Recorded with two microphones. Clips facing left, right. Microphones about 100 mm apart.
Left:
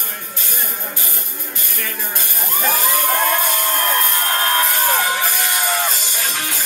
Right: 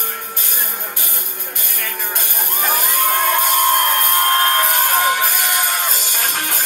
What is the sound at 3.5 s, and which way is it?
Crowd, 55° right (ahead or behind).